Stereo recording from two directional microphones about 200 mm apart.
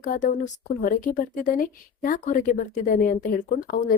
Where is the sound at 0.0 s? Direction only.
40° left (ahead or behind).